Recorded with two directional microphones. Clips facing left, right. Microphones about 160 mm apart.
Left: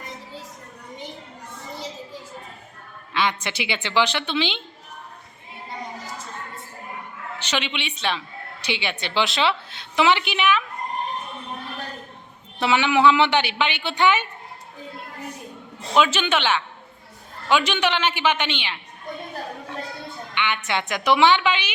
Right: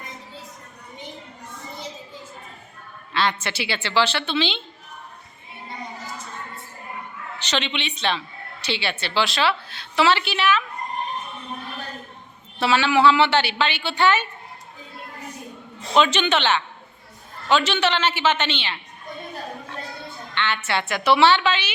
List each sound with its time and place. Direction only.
3.1 s a woman's voice: 15° left (ahead or behind)
7.4 s a woman's voice: 10° left (ahead or behind)
12.5 s a woman's voice: 15° left (ahead or behind)
16.0 s a woman's voice: 5° left (ahead or behind)
20.3 s a woman's voice: 15° left (ahead or behind)